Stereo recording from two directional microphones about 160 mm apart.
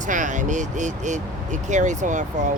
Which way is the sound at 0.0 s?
50° right (ahead or behind).